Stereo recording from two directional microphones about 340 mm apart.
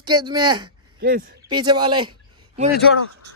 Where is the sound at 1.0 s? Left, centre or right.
Right.